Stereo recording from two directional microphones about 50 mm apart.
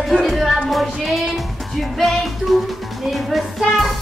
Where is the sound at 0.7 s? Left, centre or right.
Centre.